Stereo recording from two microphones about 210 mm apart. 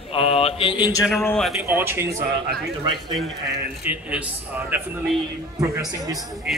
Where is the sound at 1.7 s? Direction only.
10° right (ahead or behind).